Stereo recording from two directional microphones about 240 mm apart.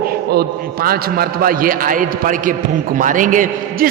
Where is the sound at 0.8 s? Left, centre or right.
Right.